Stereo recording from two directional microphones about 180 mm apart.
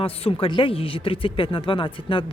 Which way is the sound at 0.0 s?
30° left (ahead or behind).